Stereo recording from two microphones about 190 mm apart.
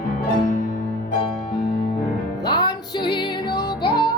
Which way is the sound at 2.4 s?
20° left (ahead or behind).